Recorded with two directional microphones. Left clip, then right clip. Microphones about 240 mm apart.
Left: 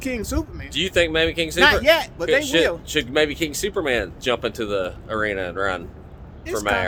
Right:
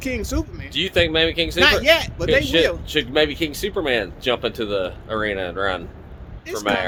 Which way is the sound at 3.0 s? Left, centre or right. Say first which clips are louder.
Right 1 dB; centre.